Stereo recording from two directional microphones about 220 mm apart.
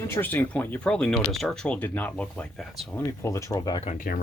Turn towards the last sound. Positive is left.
turn(degrees=40)  # may be behind; listen again after turning